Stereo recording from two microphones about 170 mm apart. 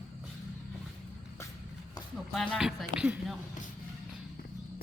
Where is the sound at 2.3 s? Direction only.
5° left (ahead or behind).